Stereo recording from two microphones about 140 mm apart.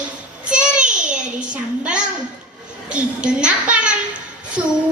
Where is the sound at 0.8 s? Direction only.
65° right (ahead or behind).